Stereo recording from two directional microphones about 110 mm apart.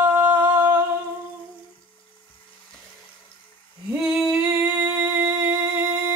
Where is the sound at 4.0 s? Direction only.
5° right (ahead or behind).